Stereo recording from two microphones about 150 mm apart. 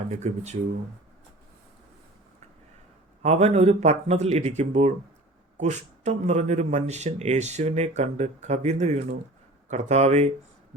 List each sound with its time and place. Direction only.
0.2 s speech: 50° right (ahead or behind)
3.2 s speech: 45° right (ahead or behind)